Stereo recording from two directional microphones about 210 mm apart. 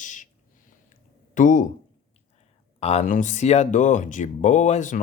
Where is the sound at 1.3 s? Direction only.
40° left (ahead or behind).